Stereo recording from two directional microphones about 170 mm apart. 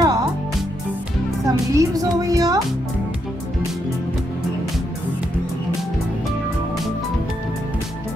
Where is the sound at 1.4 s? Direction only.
20° right (ahead or behind).